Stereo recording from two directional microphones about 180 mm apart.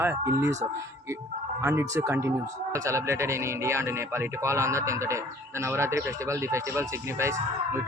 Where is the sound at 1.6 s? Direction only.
15° right (ahead or behind).